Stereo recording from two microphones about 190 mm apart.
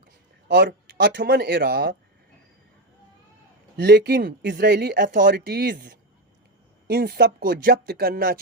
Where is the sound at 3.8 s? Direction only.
60° right (ahead or behind).